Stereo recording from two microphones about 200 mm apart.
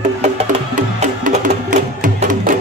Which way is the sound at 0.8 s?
40° right (ahead or behind).